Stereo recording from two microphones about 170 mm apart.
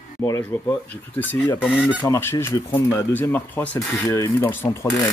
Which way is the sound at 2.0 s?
15° left (ahead or behind).